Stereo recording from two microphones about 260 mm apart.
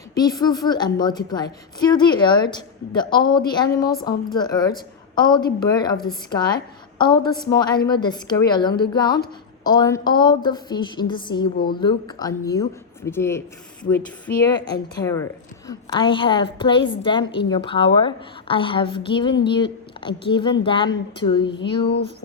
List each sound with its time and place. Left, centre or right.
0.1 s a woman's voice: centre
14.5 s a woman's voice: centre